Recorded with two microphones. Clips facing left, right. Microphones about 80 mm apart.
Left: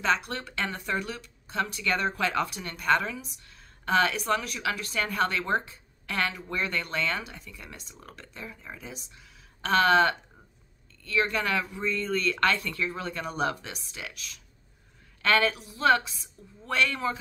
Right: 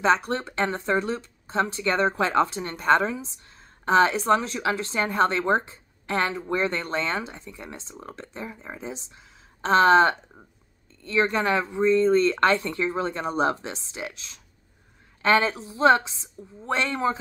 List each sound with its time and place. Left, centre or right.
0.0 s speech: right